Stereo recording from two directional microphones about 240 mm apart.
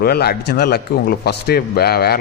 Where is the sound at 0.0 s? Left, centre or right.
Left.